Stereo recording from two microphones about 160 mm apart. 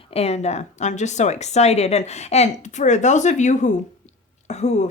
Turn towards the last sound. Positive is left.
turn(degrees=45)  # may be behind; listen again after turning